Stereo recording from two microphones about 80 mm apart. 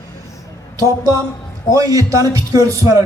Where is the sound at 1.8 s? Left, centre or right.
Right.